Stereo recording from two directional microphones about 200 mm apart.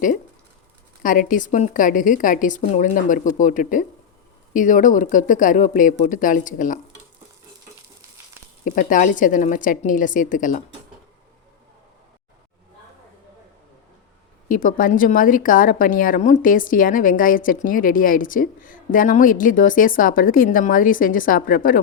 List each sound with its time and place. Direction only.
1.0 s a woman's voice: 40° left (ahead or behind)
8.6 s a woman's voice: 40° left (ahead or behind)
14.4 s speech: 40° left (ahead or behind)